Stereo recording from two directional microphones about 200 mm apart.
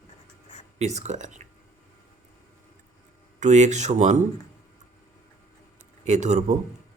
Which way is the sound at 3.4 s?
35° right (ahead or behind).